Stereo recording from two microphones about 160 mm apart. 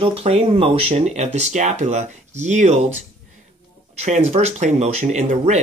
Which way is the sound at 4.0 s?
45° right (ahead or behind).